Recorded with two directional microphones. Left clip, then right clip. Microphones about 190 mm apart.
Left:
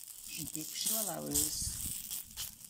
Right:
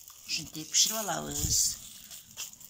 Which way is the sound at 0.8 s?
20° left (ahead or behind).